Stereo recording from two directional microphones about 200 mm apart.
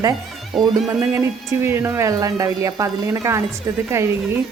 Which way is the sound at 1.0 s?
15° right (ahead or behind).